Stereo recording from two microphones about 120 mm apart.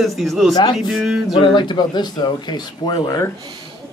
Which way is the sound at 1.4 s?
40° left (ahead or behind).